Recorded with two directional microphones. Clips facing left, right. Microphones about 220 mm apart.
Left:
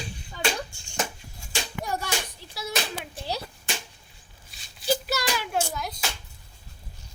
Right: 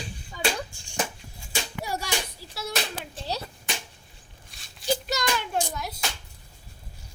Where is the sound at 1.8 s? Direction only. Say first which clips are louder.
Left 2 dB; 10° right (ahead or behind).